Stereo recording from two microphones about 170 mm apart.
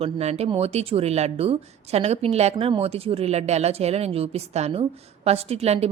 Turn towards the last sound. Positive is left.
turn(degrees=-40)  # may be behind; listen again after turning